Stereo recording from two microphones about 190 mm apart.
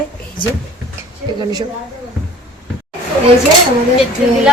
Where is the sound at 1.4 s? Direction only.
20° right (ahead or behind).